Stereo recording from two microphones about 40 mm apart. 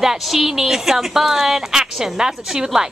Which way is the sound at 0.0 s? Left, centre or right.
Centre.